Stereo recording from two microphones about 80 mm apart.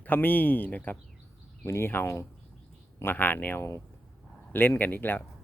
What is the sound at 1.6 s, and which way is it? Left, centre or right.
Speech, left.